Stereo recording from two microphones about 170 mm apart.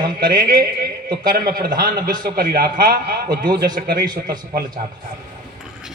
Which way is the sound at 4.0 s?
25° right (ahead or behind).